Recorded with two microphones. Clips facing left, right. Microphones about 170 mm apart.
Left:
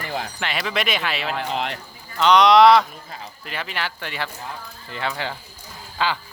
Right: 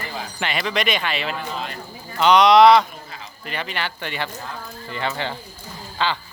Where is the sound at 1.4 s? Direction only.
75° left (ahead or behind).